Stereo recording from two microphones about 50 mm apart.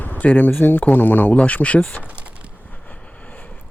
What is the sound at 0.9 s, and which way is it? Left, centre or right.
Speech, left.